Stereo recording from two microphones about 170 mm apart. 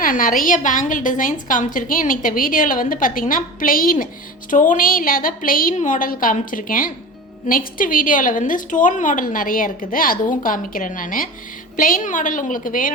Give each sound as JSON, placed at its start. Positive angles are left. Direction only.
{"t": 0.0, "sound": "a woman's voice", "side_deg": 55}